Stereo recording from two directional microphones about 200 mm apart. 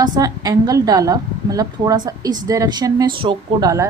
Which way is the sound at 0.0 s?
20° right (ahead or behind).